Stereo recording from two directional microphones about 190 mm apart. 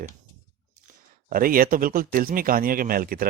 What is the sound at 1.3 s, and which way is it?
Speech, 50° right (ahead or behind).